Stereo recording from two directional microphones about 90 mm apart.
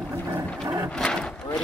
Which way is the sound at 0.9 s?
10° left (ahead or behind).